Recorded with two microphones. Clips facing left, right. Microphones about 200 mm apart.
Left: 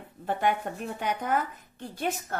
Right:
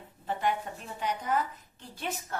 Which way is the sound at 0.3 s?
55° left (ahead or behind).